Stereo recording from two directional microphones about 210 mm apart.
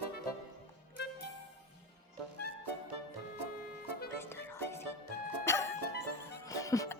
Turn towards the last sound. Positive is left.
turn(degrees=15)  # may be behind; listen again after turning